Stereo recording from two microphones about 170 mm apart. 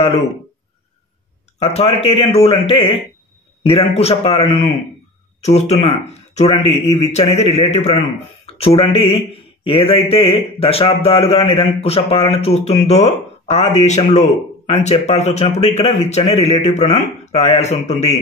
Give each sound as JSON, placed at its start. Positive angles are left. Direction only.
{"t": 1.6, "sound": "a man's voice", "side_deg": 35}